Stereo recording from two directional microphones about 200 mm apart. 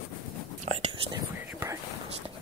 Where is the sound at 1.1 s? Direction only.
15° right (ahead or behind).